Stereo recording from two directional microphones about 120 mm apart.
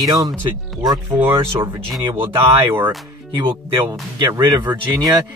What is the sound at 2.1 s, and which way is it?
Speech, 40° right (ahead or behind).